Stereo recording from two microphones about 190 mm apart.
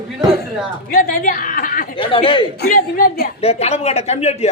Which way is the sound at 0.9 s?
50° left (ahead or behind).